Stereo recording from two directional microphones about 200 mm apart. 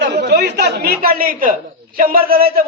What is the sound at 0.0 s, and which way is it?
Chatter, 55° right (ahead or behind).